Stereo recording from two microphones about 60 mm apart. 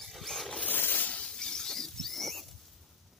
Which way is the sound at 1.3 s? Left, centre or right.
Centre.